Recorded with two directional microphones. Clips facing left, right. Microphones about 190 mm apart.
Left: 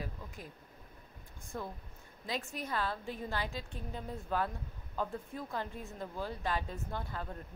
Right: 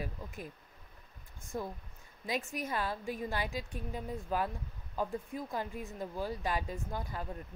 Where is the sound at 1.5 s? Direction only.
25° right (ahead or behind).